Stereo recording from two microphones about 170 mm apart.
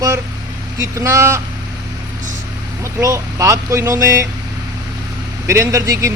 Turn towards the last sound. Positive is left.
turn(degrees=-20)  # may be behind; listen again after turning